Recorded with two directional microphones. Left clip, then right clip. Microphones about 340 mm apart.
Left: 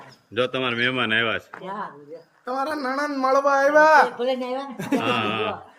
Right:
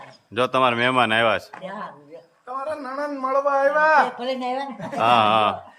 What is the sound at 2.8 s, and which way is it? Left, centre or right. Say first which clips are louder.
Speech: left 3 dB; left.